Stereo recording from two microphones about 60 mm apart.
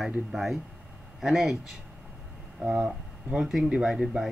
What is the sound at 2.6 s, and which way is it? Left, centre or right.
Speech, centre.